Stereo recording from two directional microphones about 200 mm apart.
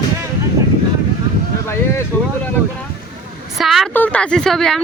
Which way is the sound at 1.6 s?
15° left (ahead or behind).